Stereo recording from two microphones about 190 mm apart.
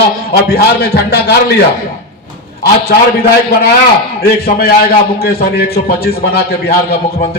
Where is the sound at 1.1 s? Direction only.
60° left (ahead or behind).